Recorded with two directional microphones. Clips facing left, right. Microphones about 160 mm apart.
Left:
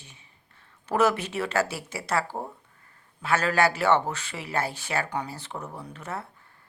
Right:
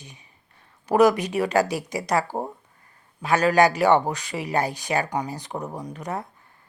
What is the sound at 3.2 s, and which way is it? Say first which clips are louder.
Speech: right 5 dB; 15° right (ahead or behind).